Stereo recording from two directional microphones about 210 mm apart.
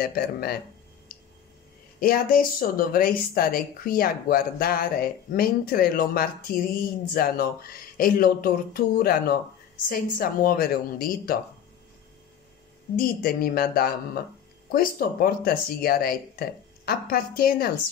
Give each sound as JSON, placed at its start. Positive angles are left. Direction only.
{"t": 0.0, "sound": "speech", "side_deg": 45}
{"t": 1.1, "sound": "a sound", "side_deg": 45}
{"t": 2.0, "sound": "speech", "side_deg": 45}
{"t": 12.9, "sound": "speech", "side_deg": 45}